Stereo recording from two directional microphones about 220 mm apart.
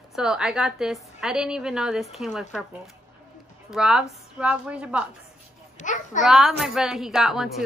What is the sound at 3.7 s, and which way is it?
A woman's voice, 5° right (ahead or behind).